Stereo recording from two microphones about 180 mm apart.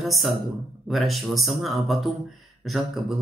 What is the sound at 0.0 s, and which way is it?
Speech, centre (ahead or behind).